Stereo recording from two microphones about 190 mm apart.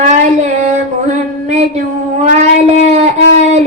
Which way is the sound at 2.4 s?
35° right (ahead or behind).